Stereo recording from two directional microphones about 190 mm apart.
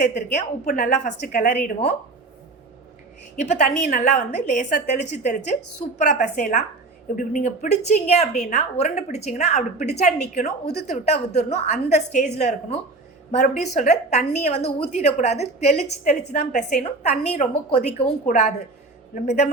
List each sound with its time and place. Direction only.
0.1 s a woman's voice: 40° left (ahead or behind)
3.4 s a woman's voice: 40° left (ahead or behind)